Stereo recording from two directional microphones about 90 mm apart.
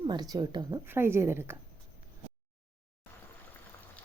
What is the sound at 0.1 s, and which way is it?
Speech, 50° right (ahead or behind).